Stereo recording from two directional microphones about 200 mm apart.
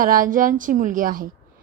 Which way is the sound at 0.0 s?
45° right (ahead or behind).